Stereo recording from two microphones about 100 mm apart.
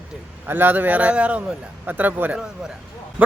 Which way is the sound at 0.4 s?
20° right (ahead or behind).